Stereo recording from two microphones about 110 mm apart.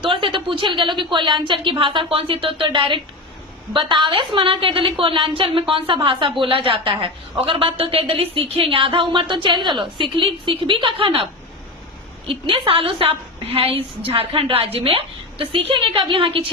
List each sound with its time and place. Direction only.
0.0 s a woman's voice: 50° right (ahead or behind)
12.3 s a woman's voice: 55° right (ahead or behind)